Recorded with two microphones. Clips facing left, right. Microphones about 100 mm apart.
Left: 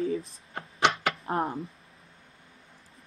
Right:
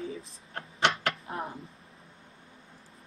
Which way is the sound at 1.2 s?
50° left (ahead or behind).